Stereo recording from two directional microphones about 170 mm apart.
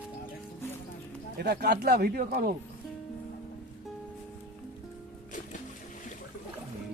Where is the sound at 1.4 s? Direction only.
75° right (ahead or behind); by 2.5 s 60° right (ahead or behind).